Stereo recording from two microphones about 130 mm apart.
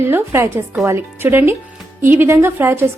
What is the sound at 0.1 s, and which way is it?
Speech, 20° right (ahead or behind).